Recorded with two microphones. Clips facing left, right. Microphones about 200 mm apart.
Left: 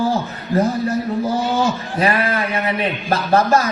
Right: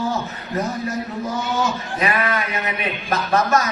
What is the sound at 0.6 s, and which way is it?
A man's voice, 30° left (ahead or behind).